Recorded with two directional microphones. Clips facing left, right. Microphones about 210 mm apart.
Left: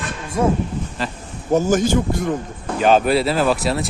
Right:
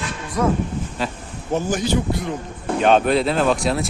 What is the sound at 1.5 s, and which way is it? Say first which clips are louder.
Speech: left 4 dB; 45° left (ahead or behind).